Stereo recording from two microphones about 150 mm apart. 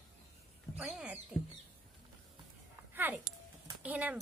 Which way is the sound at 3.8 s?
10° right (ahead or behind).